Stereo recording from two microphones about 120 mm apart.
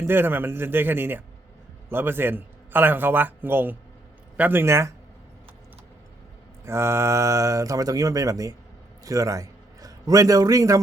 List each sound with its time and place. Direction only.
0.0 s a man's voice: 20° right (ahead or behind)
6.7 s a man's voice: 20° right (ahead or behind)